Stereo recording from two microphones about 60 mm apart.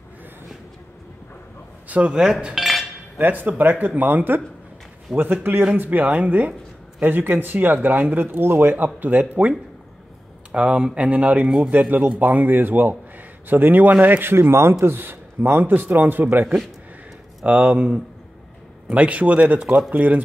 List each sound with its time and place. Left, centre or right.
1.9 s speech: right
2.5 s dishes: centre
3.2 s speech: right
11.7 s speech: right
17.5 s speech: right